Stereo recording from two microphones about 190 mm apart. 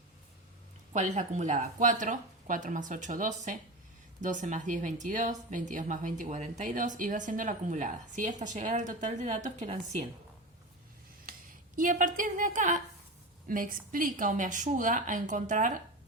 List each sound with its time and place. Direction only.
0.9 s speech: 40° right (ahead or behind)
11.3 s a woman's voice: 45° right (ahead or behind)